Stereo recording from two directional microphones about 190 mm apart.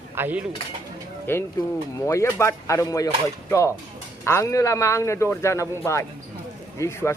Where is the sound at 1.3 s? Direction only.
10° left (ahead or behind).